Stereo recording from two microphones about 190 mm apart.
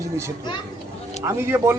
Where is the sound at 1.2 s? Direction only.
15° right (ahead or behind).